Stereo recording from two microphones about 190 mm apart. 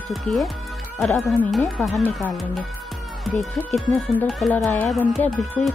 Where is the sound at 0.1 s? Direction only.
Centre (ahead or behind).